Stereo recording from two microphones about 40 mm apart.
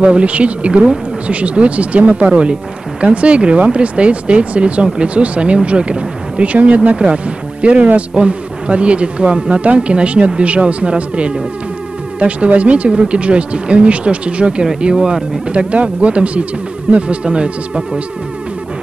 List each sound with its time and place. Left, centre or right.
0.0 s speech: right
8.1 s speech: right
15.7 s speech: right